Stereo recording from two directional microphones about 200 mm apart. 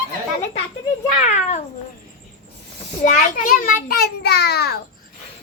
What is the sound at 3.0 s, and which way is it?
A child's voice, 40° left (ahead or behind).